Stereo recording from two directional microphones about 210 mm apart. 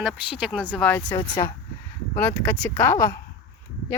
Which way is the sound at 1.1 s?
20° left (ahead or behind).